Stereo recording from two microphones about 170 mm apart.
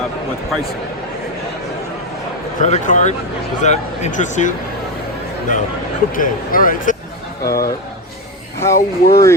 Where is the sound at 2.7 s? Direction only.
45° left (ahead or behind).